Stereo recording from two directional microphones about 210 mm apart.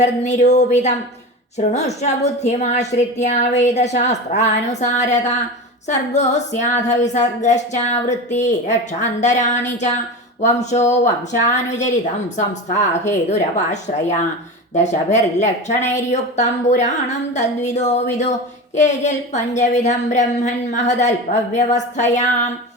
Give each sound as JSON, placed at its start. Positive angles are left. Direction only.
{"t": 0.0, "sound": "music", "side_deg": 35}